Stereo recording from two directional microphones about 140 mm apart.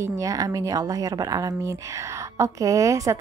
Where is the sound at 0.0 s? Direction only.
25° right (ahead or behind).